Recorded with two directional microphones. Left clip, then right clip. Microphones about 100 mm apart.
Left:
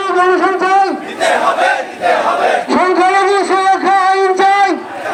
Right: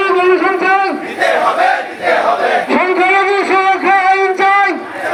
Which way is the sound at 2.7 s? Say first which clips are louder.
Left 1 dB; 20° left (ahead or behind).